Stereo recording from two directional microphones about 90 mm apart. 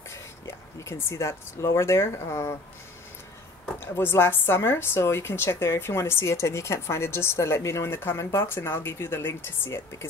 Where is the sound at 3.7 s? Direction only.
25° left (ahead or behind).